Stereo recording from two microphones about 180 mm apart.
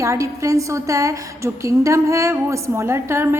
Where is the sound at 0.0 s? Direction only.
15° right (ahead or behind).